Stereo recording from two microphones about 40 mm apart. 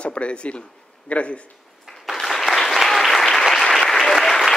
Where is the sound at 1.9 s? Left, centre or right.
Centre.